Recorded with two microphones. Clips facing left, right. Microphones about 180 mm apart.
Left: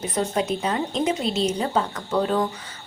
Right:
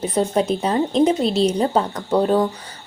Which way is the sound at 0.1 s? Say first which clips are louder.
Right 4 dB; 30° right (ahead or behind).